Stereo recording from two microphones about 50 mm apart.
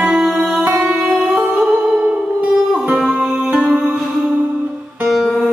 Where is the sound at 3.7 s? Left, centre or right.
Centre.